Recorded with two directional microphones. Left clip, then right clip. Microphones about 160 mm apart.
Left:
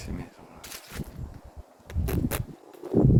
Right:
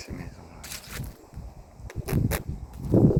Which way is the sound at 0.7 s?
90° right.